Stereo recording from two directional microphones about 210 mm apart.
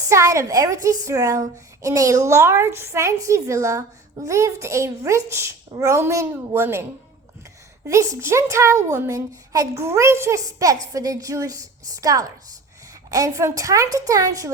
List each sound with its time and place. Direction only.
0.1 s a woman's voice: 15° right (ahead or behind)
7.9 s a woman's voice: 15° right (ahead or behind)